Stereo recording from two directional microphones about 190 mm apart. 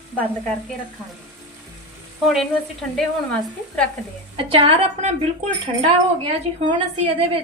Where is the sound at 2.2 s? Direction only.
Centre (ahead or behind).